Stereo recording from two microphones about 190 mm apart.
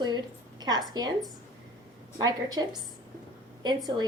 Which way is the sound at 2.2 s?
20° right (ahead or behind).